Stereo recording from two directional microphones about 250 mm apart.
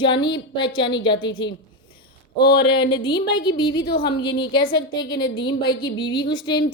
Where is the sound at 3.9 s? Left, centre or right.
Left.